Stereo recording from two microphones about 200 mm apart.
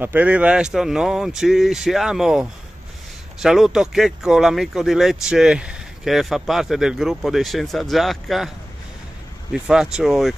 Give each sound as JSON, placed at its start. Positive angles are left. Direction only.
{"t": 0.0, "sound": "speech", "side_deg": -10}
{"t": 9.5, "sound": "speech", "side_deg": -5}